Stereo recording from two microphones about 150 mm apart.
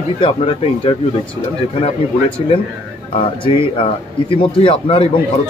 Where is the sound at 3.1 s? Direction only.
35° left (ahead or behind).